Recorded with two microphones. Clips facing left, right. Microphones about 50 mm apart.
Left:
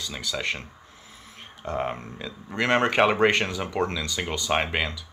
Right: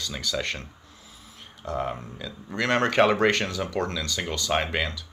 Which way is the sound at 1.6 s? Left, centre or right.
Left.